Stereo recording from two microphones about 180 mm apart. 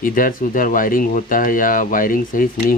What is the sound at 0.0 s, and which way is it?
Speech, 50° left (ahead or behind).